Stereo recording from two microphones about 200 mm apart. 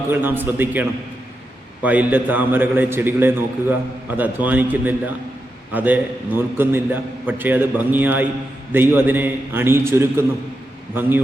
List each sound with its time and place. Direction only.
0.1 s a man's voice: 10° right (ahead or behind)